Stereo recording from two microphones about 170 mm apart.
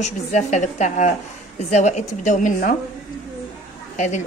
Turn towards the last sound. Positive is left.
turn(degrees=45)  # may be behind; listen again after turning